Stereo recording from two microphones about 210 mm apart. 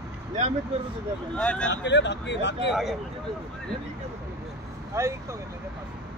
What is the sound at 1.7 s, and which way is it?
Speech, 55° left (ahead or behind).